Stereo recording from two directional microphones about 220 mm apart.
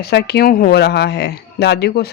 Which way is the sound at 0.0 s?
45° left (ahead or behind).